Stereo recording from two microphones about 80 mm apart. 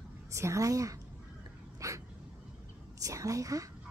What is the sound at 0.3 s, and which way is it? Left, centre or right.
Speech, right.